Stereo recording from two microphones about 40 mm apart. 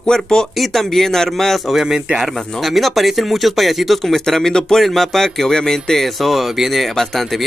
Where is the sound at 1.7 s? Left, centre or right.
Centre.